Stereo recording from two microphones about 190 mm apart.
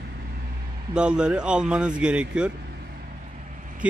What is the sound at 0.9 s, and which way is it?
Speech, 5° right (ahead or behind).